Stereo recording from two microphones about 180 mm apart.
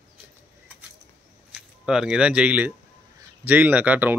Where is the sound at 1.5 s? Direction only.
5° right (ahead or behind).